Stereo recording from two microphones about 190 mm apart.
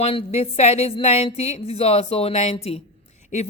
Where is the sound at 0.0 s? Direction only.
30° left (ahead or behind).